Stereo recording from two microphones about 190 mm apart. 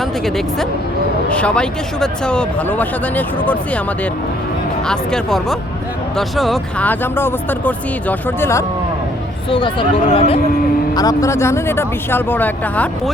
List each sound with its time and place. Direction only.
1.3 s speech: 5° left (ahead or behind)
4.9 s speech: 5° left (ahead or behind)
9.5 s speech: 25° left (ahead or behind)
10.9 s speech: 20° left (ahead or behind)